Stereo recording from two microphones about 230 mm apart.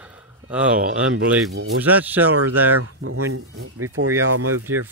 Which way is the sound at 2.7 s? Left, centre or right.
Right.